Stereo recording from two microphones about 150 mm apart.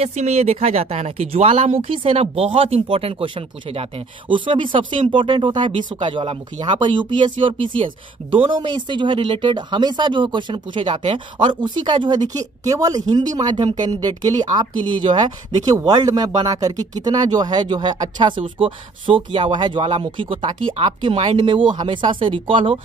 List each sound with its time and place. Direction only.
0.0 s speech: 45° right (ahead or behind)